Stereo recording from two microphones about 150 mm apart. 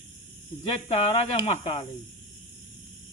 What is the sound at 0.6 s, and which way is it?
Speech, 40° left (ahead or behind).